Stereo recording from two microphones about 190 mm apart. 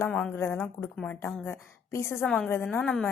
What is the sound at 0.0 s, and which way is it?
A woman's voice, 5° left (ahead or behind).